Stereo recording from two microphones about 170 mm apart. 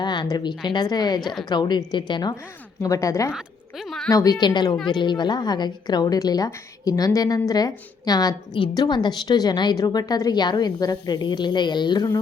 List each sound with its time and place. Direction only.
0.0 s a woman's voice: 25° left (ahead or behind)
1.2 s a woman's voice: centre (ahead or behind)
1.5 s a woman's voice: 25° left (ahead or behind)
3.3 s a sound: centre (ahead or behind)
4.1 s a woman's voice: 20° left (ahead or behind)